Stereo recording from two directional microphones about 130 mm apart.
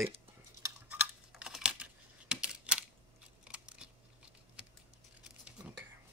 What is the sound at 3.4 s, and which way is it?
Scissors, 10° right (ahead or behind).